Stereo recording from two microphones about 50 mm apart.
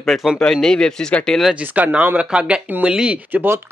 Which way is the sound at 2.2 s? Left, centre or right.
Right.